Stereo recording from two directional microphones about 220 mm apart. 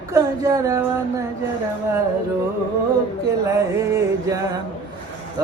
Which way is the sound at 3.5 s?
15° right (ahead or behind).